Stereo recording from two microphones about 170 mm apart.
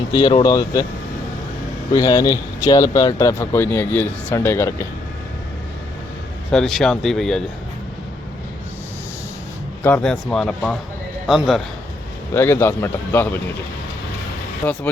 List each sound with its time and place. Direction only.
0.1 s speech: 25° left (ahead or behind)
1.9 s speech: 20° left (ahead or behind)
6.5 s speech: centre (ahead or behind)
9.8 s speech: 5° left (ahead or behind)
12.3 s speech: 15° left (ahead or behind)